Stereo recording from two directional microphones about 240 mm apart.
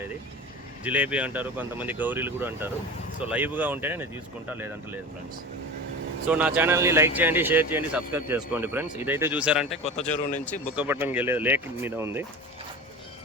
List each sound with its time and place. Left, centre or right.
0.9 s speech: centre
6.3 s speech: centre
9.8 s a man's voice: left
10.8 s speech: centre